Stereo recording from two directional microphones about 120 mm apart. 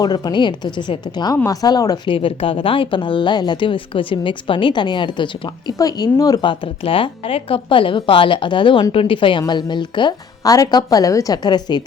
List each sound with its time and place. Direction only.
0.0 s speech: 35° left (ahead or behind)
2.0 s speech: 50° left (ahead or behind)